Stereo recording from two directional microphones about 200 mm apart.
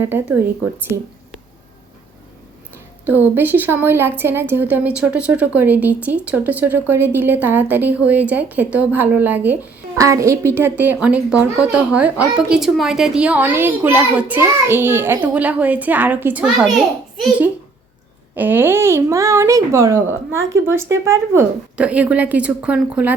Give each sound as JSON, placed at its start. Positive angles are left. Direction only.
{"t": 0.0, "sound": "a woman's voice", "side_deg": -10}
{"t": 3.1, "sound": "a woman's voice", "side_deg": -10}
{"t": 20.3, "sound": "speech", "side_deg": -75}
{"t": 20.7, "sound": "a woman's voice", "side_deg": -15}